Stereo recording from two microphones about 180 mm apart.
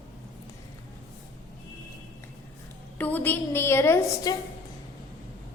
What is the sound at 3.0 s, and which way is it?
A woman's voice, 10° left (ahead or behind).